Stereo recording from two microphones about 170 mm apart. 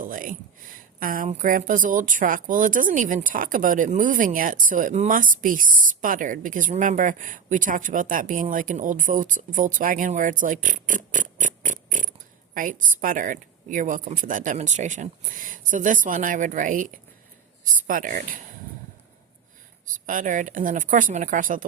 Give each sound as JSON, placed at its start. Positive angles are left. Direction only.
{"t": 0.0, "sound": "a sound", "side_deg": -55}
{"t": 1.3, "sound": "speech", "side_deg": -50}
{"t": 20.1, "sound": "speech", "side_deg": -50}